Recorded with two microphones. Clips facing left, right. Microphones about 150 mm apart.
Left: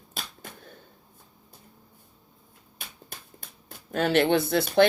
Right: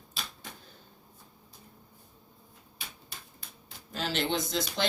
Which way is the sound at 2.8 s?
50° left (ahead or behind).